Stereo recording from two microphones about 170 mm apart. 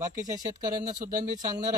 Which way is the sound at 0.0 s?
20° right (ahead or behind).